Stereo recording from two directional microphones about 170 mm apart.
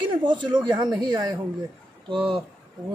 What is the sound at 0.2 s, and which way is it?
Speech, 25° right (ahead or behind).